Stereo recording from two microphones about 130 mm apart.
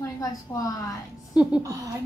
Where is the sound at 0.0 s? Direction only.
25° left (ahead or behind).